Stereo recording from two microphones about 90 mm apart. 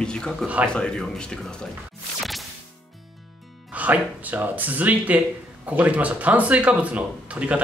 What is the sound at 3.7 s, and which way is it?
Speech, 15° right (ahead or behind).